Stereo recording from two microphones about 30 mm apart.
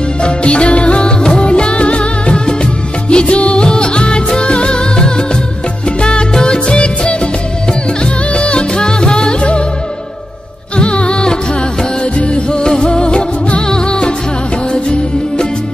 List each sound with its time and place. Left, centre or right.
0.2 s music: left
1.2 s music: left
1.5 s music: left
3.6 s music: left
10.8 s music: left